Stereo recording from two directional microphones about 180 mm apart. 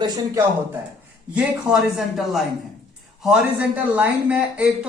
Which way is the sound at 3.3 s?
10° right (ahead or behind).